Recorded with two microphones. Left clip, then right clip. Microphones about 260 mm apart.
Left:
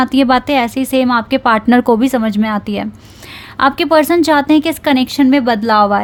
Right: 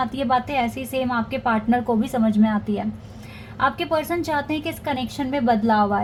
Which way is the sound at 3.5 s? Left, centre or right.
Left.